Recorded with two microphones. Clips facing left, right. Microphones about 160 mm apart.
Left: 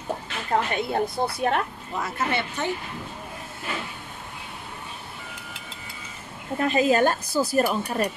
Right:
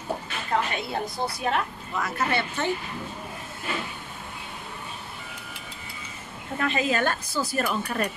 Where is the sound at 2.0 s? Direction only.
20° left (ahead or behind).